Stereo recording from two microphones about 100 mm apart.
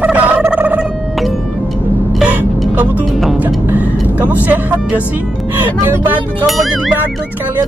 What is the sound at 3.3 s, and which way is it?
Music, 15° right (ahead or behind).